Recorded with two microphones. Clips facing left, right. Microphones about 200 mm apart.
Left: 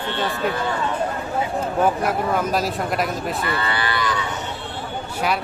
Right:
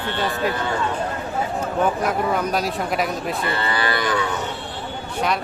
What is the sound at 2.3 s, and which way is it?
Speech, centre (ahead or behind).